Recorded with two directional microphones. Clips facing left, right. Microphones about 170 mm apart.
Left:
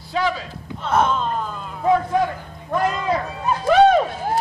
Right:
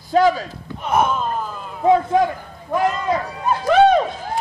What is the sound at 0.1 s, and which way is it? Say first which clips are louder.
Speech: right 7 dB; 40° right (ahead or behind).